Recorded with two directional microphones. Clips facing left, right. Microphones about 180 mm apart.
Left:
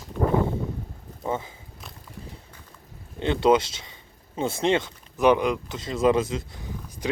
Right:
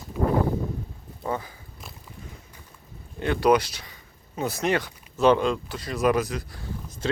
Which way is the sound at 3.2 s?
25° left (ahead or behind).